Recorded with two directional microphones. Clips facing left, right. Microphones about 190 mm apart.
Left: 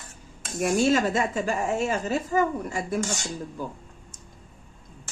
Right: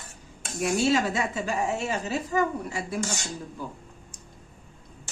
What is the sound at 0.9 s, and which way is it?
A woman's voice, 45° left (ahead or behind).